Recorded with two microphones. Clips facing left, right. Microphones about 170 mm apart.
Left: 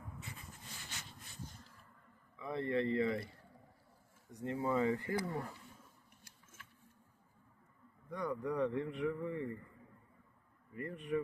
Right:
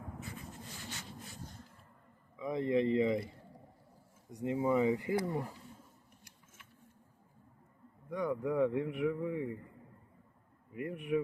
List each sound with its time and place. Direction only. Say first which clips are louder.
2.3 s a man's voice: right 5 dB; 15° right (ahead or behind)
4.3 s a man's voice: right 5 dB; 15° right (ahead or behind)
8.1 s a man's voice: right 4 dB; 15° right (ahead or behind)
10.8 s a man's voice: right 4 dB; 10° right (ahead or behind)